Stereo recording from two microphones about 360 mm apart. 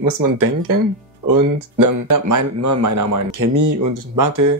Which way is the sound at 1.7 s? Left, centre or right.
Right.